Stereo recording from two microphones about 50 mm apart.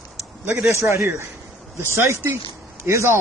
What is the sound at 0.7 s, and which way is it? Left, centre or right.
Speech, right.